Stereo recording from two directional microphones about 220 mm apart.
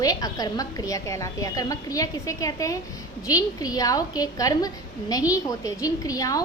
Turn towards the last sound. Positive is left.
turn(degrees=15)  # may be behind; listen again after turning